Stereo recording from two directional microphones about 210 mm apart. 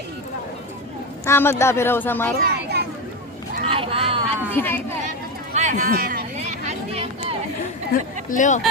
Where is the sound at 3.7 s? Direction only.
25° right (ahead or behind).